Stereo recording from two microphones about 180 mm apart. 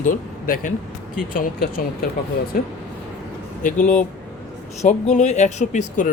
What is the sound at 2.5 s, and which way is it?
Speech, 50° left (ahead or behind).